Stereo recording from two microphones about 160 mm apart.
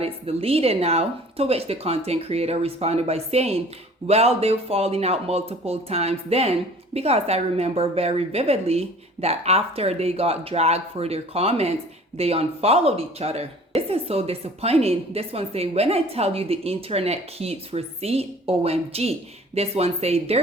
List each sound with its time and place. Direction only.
0.0 s speech: 35° right (ahead or behind)